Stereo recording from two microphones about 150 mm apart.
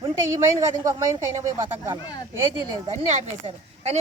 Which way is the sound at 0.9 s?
20° right (ahead or behind).